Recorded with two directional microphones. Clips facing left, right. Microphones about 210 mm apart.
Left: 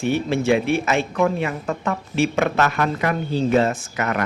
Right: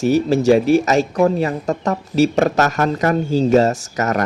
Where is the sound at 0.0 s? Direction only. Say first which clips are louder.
Right 6 dB; 40° right (ahead or behind).